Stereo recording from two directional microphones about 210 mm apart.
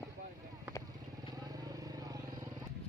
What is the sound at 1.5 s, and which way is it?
Vehicle, 15° right (ahead or behind).